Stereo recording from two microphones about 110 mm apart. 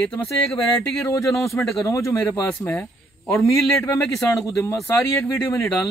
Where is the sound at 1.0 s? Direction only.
30° left (ahead or behind).